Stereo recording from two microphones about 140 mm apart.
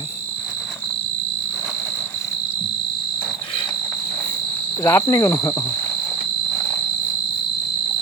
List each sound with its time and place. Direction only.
4.8 s speech: 20° left (ahead or behind)